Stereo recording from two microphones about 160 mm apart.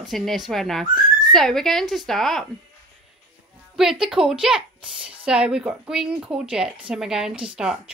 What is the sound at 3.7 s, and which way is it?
A child's voice, centre (ahead or behind).